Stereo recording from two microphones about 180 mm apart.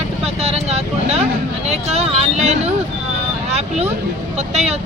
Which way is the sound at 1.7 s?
35° right (ahead or behind).